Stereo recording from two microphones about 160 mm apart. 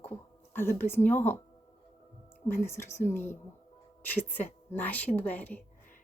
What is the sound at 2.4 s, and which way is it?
A woman's voice, 15° left (ahead or behind).